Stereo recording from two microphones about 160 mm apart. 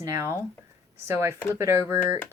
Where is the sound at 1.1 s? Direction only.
15° right (ahead or behind).